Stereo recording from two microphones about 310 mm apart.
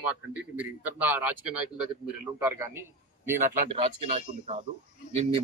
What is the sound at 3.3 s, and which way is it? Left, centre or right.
Speech, right.